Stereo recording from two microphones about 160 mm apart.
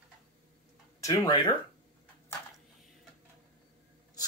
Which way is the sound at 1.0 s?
25° left (ahead or behind).